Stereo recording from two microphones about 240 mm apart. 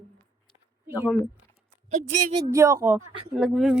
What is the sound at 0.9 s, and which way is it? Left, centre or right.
Speech, centre.